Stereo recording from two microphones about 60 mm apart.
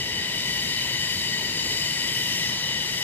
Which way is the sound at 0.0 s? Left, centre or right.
Left.